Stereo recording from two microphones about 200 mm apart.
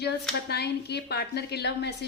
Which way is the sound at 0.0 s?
55° left (ahead or behind).